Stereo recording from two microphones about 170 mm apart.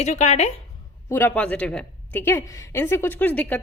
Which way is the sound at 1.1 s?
10° left (ahead or behind).